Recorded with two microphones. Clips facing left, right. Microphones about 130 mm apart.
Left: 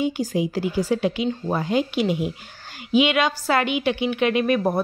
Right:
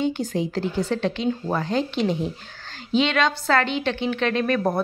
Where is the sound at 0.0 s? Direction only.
5° left (ahead or behind).